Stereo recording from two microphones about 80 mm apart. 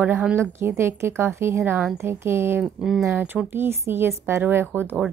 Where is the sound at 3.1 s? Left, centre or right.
Right.